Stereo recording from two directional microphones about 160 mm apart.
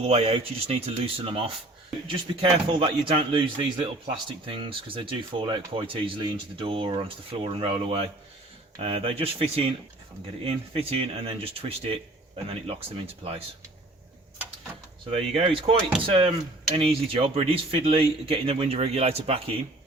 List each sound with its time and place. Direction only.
0.0 s speech: 40° right (ahead or behind)
15.4 s speech: 35° right (ahead or behind)